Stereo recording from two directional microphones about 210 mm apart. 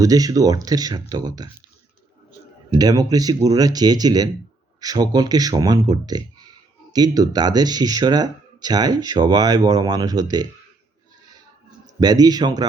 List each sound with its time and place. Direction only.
0.0 s speech: 15° right (ahead or behind)
2.7 s speech: 20° right (ahead or behind)
11.9 s speech: 20° right (ahead or behind)